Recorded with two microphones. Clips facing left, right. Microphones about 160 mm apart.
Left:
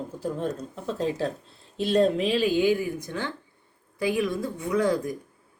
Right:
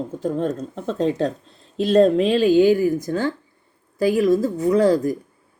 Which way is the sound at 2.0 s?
40° right (ahead or behind).